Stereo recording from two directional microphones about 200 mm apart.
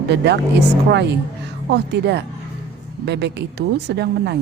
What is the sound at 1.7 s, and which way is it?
A woman's voice, 55° right (ahead or behind).